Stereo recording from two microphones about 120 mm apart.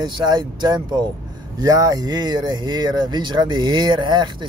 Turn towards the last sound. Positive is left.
turn(degrees=-40)  # may be behind; listen again after turning